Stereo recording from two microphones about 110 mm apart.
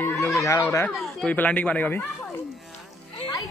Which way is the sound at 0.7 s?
15° left (ahead or behind).